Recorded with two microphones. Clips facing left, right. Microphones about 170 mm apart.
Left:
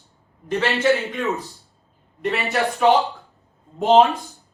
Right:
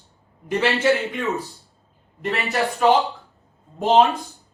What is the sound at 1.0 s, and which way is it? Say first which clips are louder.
Speech: even; centre (ahead or behind).